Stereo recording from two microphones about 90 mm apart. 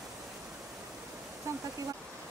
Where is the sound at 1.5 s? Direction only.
35° right (ahead or behind).